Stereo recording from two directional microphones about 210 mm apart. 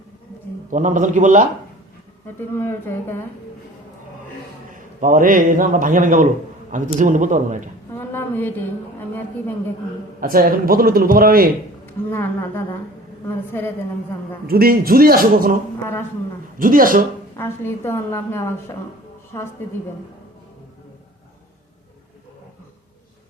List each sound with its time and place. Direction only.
0.7 s a man's voice: 35° right (ahead or behind)
2.2 s a woman's voice: 10° left (ahead or behind)
4.7 s a man's voice: 40° right (ahead or behind)
7.9 s a sound: 10° left (ahead or behind)
10.2 s a man's voice: 45° right (ahead or behind)
12.1 s a woman's voice: 10° left (ahead or behind)
14.4 s a man's voice: 45° right (ahead or behind)
16.6 s a man's voice: 40° right (ahead or behind)
17.3 s a woman's voice: 10° left (ahead or behind)